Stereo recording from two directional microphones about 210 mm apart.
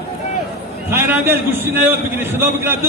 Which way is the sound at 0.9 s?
10° right (ahead or behind).